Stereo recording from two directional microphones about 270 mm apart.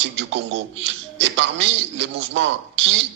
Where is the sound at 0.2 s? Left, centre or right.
Right.